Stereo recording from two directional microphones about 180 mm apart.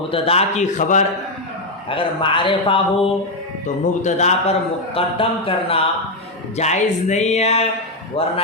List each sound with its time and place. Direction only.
0.1 s speech: 35° left (ahead or behind)
1.9 s a man's voice: 30° left (ahead or behind)